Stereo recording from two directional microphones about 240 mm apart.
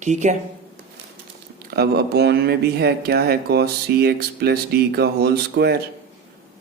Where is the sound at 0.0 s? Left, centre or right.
Right.